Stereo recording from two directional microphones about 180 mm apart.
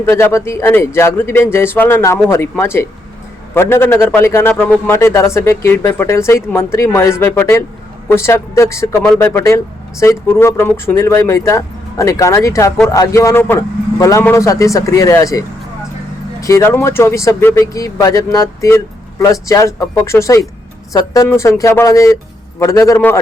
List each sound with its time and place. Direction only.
0.0 s a man's voice: 15° left (ahead or behind)